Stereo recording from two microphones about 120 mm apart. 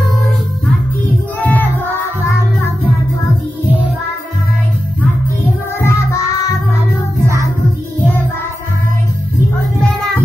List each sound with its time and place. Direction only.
1.4 s music: 15° left (ahead or behind)
5.8 s music: 25° left (ahead or behind)